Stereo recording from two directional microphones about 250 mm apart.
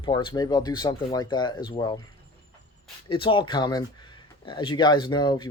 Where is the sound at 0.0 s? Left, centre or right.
Centre.